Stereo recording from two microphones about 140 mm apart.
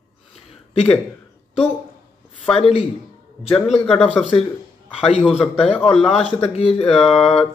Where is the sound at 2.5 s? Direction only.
45° left (ahead or behind).